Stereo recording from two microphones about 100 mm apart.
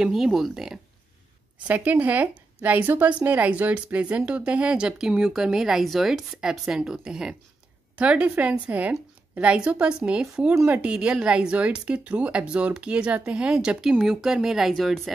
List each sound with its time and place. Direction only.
0.0 s speech: 5° right (ahead or behind)
1.7 s a woman's voice: 15° right (ahead or behind)
10.5 s speech: 25° right (ahead or behind)
10.8 s a woman's voice: 10° right (ahead or behind)